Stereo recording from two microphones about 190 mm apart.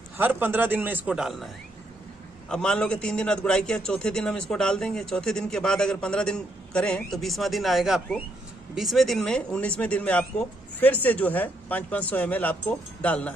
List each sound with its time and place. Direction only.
0.2 s a man's voice: 10° right (ahead or behind)
2.5 s a man's voice: 5° left (ahead or behind)